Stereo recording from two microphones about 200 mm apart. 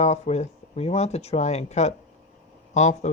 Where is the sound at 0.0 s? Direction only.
35° left (ahead or behind).